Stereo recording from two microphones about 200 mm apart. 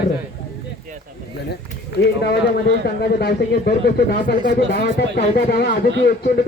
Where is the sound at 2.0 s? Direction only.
55° left (ahead or behind).